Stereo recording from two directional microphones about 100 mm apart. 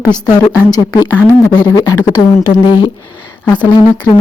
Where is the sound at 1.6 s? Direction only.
40° left (ahead or behind).